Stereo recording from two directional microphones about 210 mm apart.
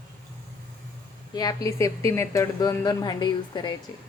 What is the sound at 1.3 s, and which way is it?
A woman's voice, 15° left (ahead or behind).